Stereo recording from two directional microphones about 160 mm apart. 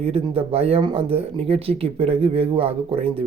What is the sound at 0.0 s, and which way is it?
Speech, 40° right (ahead or behind).